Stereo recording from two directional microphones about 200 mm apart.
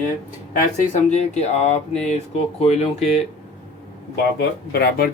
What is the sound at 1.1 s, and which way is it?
Speech, 35° left (ahead or behind).